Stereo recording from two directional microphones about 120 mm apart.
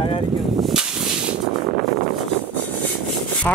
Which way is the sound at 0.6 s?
5° right (ahead or behind).